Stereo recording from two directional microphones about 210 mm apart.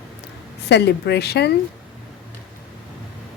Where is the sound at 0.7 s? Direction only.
55° left (ahead or behind).